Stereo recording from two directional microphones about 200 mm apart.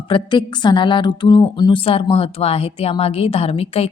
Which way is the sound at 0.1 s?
25° left (ahead or behind).